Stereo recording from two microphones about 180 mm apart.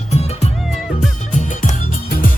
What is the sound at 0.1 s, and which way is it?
Music, 35° left (ahead or behind).